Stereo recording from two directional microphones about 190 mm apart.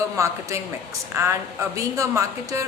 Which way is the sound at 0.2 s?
15° right (ahead or behind).